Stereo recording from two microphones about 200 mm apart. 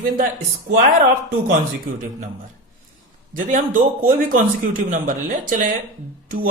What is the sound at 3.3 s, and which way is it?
Speech, 40° right (ahead or behind).